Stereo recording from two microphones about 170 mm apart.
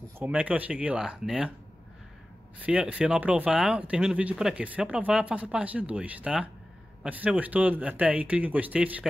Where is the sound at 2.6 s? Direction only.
5° right (ahead or behind).